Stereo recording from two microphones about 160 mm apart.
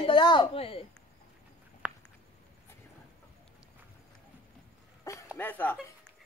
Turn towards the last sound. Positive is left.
turn(degrees=10)  # may be behind; listen again after turning